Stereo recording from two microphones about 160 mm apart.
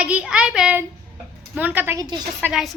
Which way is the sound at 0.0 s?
10° right (ahead or behind).